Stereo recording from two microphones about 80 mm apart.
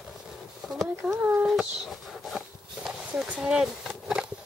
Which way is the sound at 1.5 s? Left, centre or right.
Centre.